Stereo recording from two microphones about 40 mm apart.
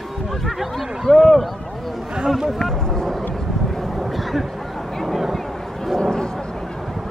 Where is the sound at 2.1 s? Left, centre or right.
Centre.